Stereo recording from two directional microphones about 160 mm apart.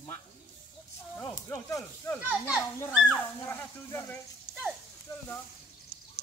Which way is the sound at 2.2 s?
5° right (ahead or behind).